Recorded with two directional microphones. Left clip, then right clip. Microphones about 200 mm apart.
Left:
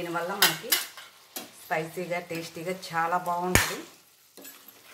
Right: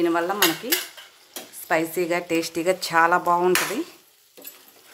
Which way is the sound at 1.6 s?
55° right (ahead or behind).